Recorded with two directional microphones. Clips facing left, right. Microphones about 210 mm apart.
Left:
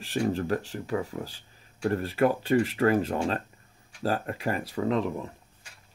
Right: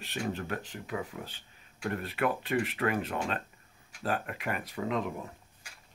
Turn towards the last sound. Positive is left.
turn(degrees=35)  # may be behind; listen again after turning